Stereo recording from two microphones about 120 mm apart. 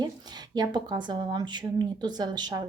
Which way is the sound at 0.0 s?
35° right (ahead or behind).